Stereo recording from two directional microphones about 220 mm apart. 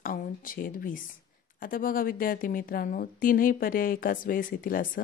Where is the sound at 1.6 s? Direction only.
40° left (ahead or behind).